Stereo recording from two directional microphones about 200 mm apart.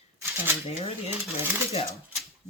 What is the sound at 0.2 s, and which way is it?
Speech, 10° right (ahead or behind).